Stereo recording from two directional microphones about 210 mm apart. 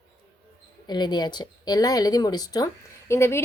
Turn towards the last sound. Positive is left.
turn(degrees=10)  # may be behind; listen again after turning